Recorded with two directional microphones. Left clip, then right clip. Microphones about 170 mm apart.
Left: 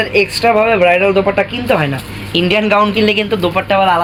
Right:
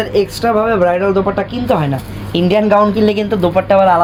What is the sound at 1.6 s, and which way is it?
Speech, 55° right (ahead or behind).